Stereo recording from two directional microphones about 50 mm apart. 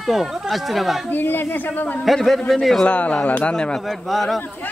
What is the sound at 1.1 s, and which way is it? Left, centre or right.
Speech, left.